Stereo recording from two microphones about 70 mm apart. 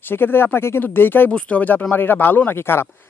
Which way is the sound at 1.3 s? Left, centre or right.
Centre.